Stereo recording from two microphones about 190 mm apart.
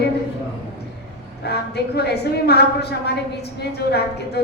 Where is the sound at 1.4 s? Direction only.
60° left (ahead or behind).